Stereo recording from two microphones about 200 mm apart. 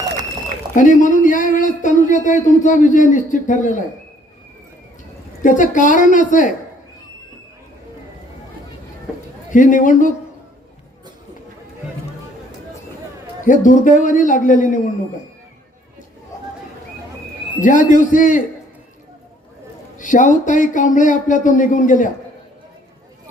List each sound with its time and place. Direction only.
0.7 s speech: 40° left (ahead or behind)
5.4 s speech: 40° left (ahead or behind)
9.5 s speech: 40° left (ahead or behind)
13.4 s speech: 40° left (ahead or behind)
17.6 s speech: 40° left (ahead or behind)
20.0 s speech: 40° left (ahead or behind)